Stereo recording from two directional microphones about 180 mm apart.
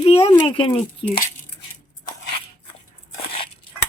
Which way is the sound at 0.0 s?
35° left (ahead or behind).